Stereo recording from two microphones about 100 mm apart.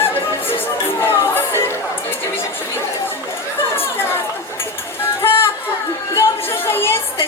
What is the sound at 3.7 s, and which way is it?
Chatter, 25° left (ahead or behind).